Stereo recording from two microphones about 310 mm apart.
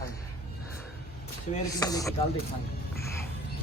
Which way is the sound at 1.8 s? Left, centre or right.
Centre.